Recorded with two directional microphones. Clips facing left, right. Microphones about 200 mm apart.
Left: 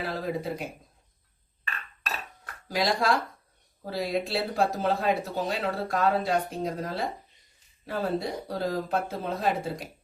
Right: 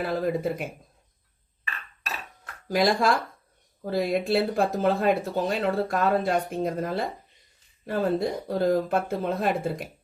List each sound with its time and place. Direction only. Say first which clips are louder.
0.0 s speech: right 5 dB; 50° right (ahead or behind)
2.6 s speech: right 3 dB; 50° right (ahead or behind)